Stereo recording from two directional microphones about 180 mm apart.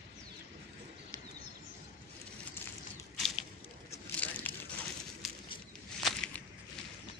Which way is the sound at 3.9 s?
10° left (ahead or behind).